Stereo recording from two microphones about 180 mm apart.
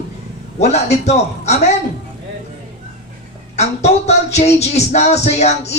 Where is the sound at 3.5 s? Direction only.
40° left (ahead or behind).